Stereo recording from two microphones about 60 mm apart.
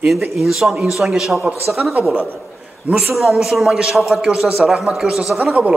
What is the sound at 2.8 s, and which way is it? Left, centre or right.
Speech, right.